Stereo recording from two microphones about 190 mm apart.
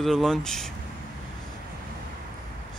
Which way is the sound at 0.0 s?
Centre (ahead or behind).